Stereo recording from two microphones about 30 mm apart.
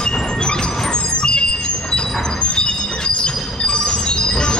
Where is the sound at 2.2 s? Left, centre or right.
Left.